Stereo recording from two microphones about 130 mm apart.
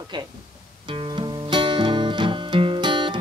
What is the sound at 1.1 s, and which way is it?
Music, 40° right (ahead or behind).